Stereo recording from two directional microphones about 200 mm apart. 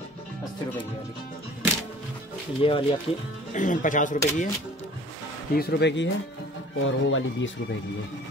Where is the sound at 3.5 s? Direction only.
40° left (ahead or behind).